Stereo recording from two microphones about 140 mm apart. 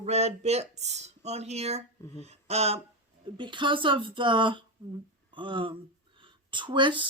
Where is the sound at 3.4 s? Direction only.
35° right (ahead or behind).